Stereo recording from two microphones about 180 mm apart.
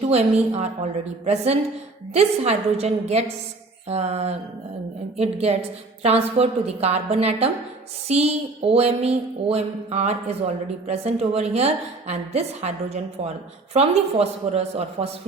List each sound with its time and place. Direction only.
0.1 s a woman's voice: 35° right (ahead or behind)